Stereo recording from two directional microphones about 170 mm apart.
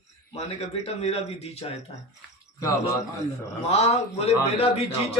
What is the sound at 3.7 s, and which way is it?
A man's voice, 40° left (ahead or behind).